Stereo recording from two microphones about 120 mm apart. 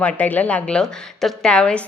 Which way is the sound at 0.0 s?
10° left (ahead or behind).